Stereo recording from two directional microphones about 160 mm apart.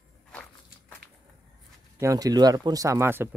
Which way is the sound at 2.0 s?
20° right (ahead or behind).